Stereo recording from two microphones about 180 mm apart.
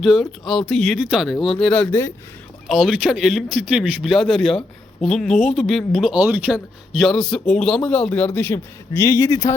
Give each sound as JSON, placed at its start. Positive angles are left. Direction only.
{"t": 0.0, "sound": "speech", "side_deg": 0}
{"t": 2.6, "sound": "speech", "side_deg": -5}